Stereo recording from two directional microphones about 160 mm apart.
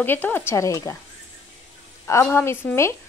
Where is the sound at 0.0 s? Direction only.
10° left (ahead or behind).